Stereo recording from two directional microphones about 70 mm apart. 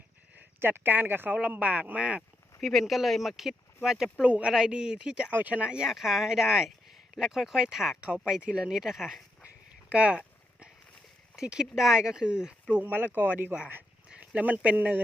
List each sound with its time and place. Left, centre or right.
0.3 s speech: right
1.4 s speech: centre
2.6 s speech: centre
9.9 s a sound: centre
11.3 s speech: centre
12.7 s speech: right